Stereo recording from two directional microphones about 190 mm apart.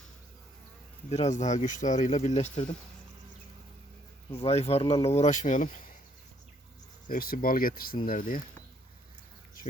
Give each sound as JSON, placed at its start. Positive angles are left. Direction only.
{"t": 1.1, "sound": "speech", "side_deg": 35}
{"t": 4.3, "sound": "speech", "side_deg": 30}
{"t": 7.1, "sound": "speech", "side_deg": 50}